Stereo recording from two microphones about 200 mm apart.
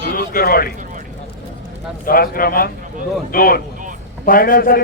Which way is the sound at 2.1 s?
45° left (ahead or behind).